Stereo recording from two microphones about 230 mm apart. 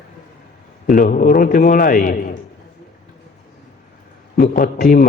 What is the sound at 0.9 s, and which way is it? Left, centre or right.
A man's voice, left.